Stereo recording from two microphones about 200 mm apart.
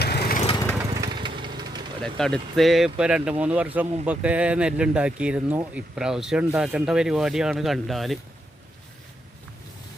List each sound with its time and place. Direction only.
0.0 s lawn mower: 55° left (ahead or behind)
0.9 s vehicle: 20° right (ahead or behind)
2.0 s speech: 5° left (ahead or behind)